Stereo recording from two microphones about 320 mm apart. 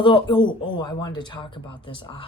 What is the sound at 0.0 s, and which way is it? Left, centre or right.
Speech, centre.